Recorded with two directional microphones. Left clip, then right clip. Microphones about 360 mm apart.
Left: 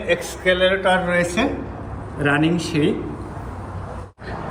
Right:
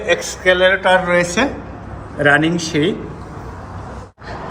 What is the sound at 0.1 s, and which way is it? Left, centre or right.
A man's voice, centre.